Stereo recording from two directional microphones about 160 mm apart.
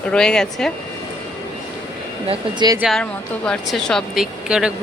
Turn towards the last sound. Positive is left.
turn(degrees=-5)  # may be behind; listen again after turning